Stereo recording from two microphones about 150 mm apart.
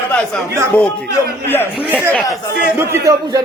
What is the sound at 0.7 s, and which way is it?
Speech, 10° left (ahead or behind).